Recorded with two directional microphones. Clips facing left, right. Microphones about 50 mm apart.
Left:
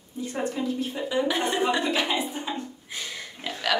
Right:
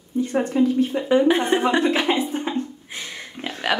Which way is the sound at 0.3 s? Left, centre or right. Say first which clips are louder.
Right 8 dB; right.